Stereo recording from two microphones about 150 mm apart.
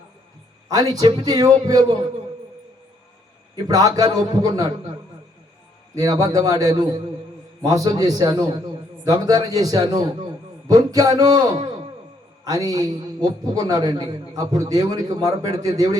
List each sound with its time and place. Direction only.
0.7 s a man's voice: 25° right (ahead or behind)
3.5 s a man's voice: 25° right (ahead or behind)
5.9 s a man's voice: 25° right (ahead or behind)
12.5 s a man's voice: 25° right (ahead or behind)